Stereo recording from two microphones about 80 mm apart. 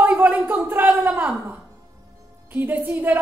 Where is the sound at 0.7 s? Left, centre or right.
Right.